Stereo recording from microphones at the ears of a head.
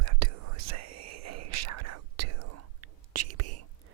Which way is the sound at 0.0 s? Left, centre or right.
Right.